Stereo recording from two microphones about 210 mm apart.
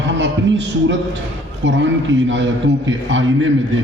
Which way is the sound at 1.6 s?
60° right (ahead or behind).